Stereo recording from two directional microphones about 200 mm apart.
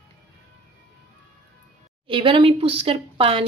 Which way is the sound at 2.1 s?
25° right (ahead or behind).